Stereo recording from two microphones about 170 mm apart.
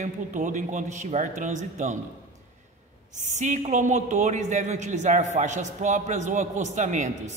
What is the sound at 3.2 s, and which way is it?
A man's voice, 45° right (ahead or behind).